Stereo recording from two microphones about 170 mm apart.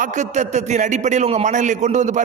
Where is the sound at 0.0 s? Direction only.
45° right (ahead or behind).